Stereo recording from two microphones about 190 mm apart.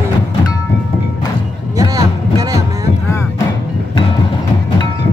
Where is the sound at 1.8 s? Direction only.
20° right (ahead or behind).